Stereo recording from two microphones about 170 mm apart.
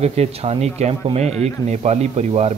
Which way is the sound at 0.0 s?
40° right (ahead or behind).